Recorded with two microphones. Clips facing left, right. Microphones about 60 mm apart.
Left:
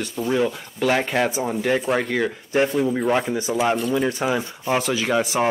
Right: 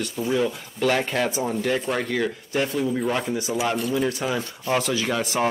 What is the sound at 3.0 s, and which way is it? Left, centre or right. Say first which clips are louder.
Speech: left 4 dB; centre.